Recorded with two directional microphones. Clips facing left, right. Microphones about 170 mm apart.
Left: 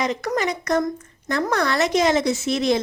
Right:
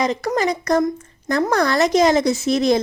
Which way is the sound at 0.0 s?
35° right (ahead or behind).